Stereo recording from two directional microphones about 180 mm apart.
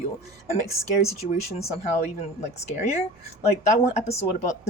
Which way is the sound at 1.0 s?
35° left (ahead or behind).